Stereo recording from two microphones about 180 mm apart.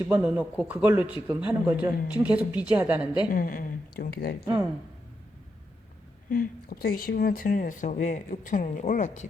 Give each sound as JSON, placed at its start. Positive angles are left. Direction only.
{"t": 0.0, "sound": "speech", "side_deg": -15}
{"t": 3.3, "sound": "speech", "side_deg": 50}
{"t": 6.3, "sound": "speech", "side_deg": 50}